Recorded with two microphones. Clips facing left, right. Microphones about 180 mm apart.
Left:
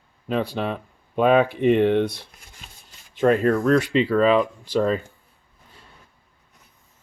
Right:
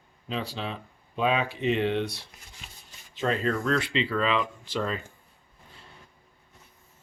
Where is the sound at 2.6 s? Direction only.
40° left (ahead or behind).